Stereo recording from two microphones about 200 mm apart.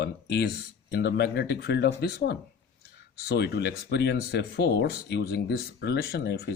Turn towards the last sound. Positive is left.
turn(degrees=55)  # may be behind; listen again after turning